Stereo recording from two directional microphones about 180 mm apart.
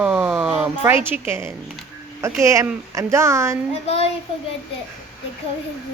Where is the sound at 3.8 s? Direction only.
35° left (ahead or behind).